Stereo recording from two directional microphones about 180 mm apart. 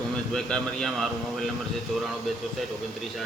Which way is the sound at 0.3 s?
5° left (ahead or behind).